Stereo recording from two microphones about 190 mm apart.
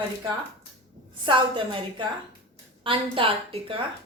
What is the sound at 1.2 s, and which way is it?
A woman's voice, 25° right (ahead or behind).